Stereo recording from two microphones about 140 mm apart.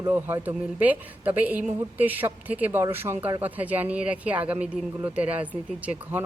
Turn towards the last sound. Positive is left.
turn(degrees=-10)  # may be behind; listen again after turning